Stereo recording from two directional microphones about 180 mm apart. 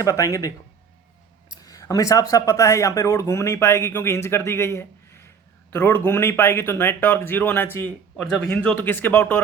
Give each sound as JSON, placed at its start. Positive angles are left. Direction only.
{"t": 0.0, "sound": "speech", "side_deg": 20}
{"t": 1.6, "sound": "speech", "side_deg": 20}